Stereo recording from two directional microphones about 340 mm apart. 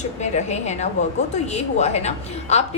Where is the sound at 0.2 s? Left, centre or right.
Centre.